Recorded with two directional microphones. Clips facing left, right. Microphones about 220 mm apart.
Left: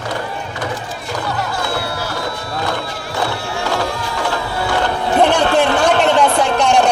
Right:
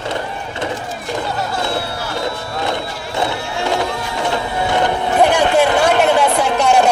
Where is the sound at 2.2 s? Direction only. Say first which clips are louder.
Right 1 dB; 25° right (ahead or behind).